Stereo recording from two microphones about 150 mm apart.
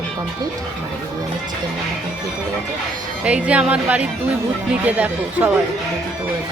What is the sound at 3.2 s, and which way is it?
Speech, 10° right (ahead or behind).